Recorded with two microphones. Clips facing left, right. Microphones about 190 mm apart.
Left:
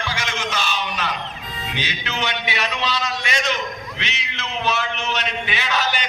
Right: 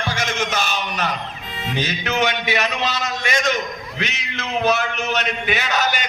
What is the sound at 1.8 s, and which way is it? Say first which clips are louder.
A man's voice: right 7 dB; 45° right (ahead or behind).